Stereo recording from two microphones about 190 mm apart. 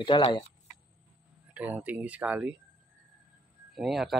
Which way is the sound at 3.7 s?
Centre (ahead or behind).